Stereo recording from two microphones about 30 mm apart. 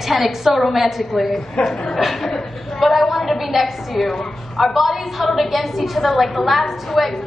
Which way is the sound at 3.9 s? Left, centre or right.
Centre.